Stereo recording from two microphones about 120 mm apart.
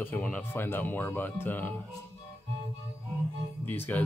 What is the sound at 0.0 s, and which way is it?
Speech, 10° left (ahead or behind).